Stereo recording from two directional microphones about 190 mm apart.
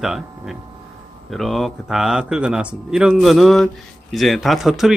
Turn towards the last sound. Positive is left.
turn(degrees=0)  # may be behind; listen again after turning